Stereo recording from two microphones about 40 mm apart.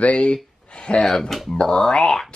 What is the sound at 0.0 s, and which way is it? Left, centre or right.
Speech, left.